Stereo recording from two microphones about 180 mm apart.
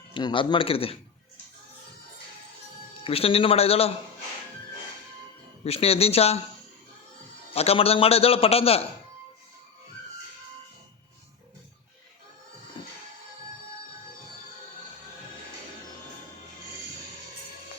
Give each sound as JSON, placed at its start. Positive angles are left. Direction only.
{"t": 0.1, "sound": "speech", "side_deg": 25}
{"t": 3.0, "sound": "a man's voice", "side_deg": 30}
{"t": 5.6, "sound": "a man's voice", "side_deg": 35}
{"t": 7.5, "sound": "a man's voice", "side_deg": 35}